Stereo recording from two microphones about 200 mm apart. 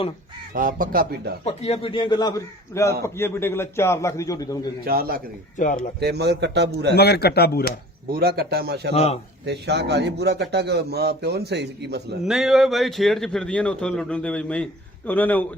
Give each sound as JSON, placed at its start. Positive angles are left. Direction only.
{"t": 0.5, "sound": "a man's voice", "side_deg": -40}
{"t": 1.5, "sound": "a man's voice", "side_deg": 30}
{"t": 4.9, "sound": "a man's voice", "side_deg": -50}
{"t": 5.5, "sound": "a man's voice", "side_deg": 40}
{"t": 6.0, "sound": "a man's voice", "side_deg": -55}
{"t": 6.9, "sound": "speech", "side_deg": 55}
{"t": 8.1, "sound": "a man's voice", "side_deg": -50}
{"t": 12.2, "sound": "a man's voice", "side_deg": 0}